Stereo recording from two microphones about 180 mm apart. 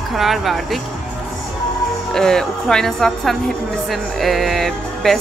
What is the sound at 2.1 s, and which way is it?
A woman's voice, 5° left (ahead or behind).